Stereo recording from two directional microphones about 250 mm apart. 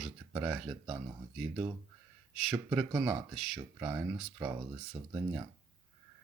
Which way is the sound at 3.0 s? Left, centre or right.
Centre.